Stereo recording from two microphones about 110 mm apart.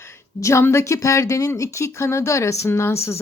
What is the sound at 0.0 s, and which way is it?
A woman's voice, 25° left (ahead or behind).